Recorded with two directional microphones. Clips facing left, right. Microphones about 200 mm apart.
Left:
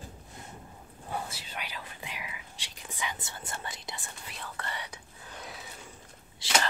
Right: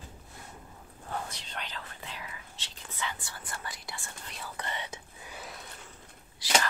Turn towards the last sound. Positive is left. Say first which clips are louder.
# right 3 dB
turn(degrees=25)  # may be behind; listen again after turning